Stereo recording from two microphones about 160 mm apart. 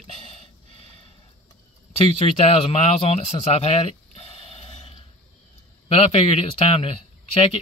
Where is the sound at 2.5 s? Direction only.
40° left (ahead or behind).